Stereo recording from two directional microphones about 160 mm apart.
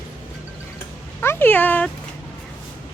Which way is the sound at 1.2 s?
15° left (ahead or behind).